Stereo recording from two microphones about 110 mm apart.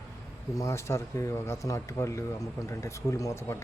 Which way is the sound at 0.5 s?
30° left (ahead or behind).